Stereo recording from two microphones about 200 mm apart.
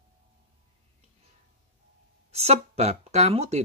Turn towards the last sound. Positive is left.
turn(degrees=-30)  # may be behind; listen again after turning